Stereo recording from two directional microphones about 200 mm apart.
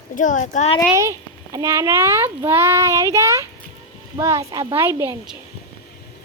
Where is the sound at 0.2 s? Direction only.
40° left (ahead or behind).